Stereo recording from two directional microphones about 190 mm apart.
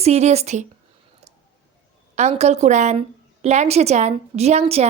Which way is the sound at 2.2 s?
35° right (ahead or behind).